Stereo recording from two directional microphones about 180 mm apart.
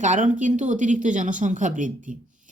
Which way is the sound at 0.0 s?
45° right (ahead or behind).